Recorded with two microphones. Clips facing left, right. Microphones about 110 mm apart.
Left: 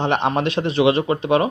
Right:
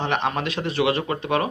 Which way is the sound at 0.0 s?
30° left (ahead or behind).